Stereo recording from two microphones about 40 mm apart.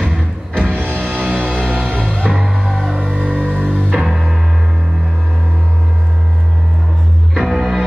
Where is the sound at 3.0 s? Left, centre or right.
Left.